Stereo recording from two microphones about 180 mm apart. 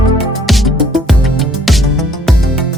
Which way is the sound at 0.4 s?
Centre (ahead or behind).